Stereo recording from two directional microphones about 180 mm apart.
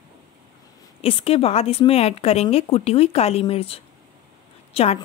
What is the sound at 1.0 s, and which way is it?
Speech, 30° left (ahead or behind).